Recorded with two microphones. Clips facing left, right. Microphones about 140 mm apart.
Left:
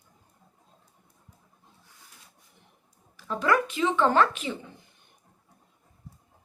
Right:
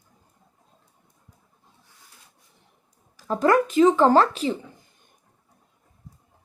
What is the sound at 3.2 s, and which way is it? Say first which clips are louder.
Speech: right 6 dB; 40° right (ahead or behind).